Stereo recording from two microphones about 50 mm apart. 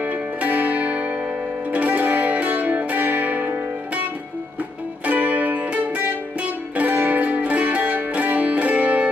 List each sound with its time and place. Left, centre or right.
0.0 s music: right
5.0 s music: right